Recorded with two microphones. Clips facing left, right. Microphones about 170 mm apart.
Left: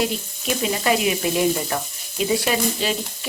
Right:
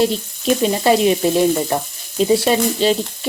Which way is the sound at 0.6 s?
30° right (ahead or behind).